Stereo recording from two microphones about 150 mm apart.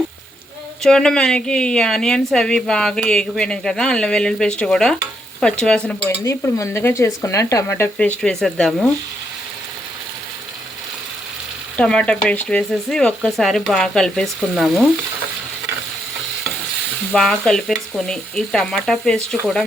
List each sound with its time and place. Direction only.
0.8 s a woman's voice: 5° left (ahead or behind)
6.2 s speech: 20° left (ahead or behind)
7.9 s a woman's voice: 10° left (ahead or behind)
11.8 s a woman's voice: 5° left (ahead or behind)
17.1 s a woman's voice: 5° left (ahead or behind)